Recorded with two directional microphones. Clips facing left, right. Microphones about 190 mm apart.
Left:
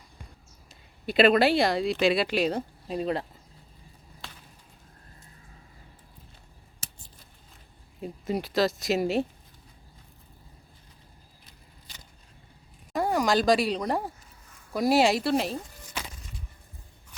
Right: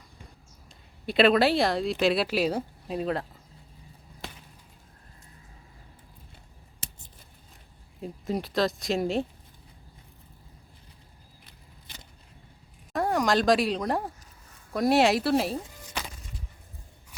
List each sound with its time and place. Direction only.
1.0 s speech: centre (ahead or behind)
8.0 s speech: centre (ahead or behind)
12.9 s speech: centre (ahead or behind)